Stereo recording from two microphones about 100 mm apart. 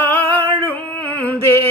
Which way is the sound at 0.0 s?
20° left (ahead or behind).